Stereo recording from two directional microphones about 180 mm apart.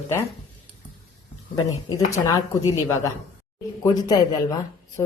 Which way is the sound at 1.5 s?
20° left (ahead or behind).